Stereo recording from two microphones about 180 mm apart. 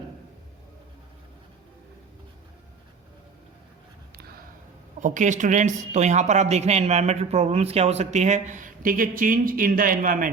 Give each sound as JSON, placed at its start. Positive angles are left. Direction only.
{"t": 4.9, "sound": "speech", "side_deg": -45}